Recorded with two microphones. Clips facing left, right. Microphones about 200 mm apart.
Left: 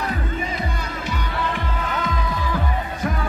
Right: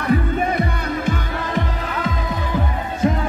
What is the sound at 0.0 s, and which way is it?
Music, 60° right (ahead or behind).